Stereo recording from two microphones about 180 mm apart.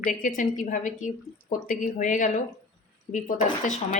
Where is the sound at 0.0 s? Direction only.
45° left (ahead or behind).